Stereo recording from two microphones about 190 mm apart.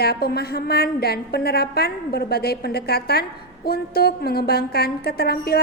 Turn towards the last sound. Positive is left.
turn(degrees=55)  # may be behind; listen again after turning